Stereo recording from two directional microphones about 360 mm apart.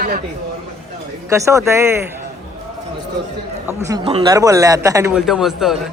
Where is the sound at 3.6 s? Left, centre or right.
Centre.